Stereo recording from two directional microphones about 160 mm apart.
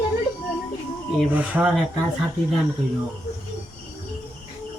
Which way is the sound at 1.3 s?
10° right (ahead or behind).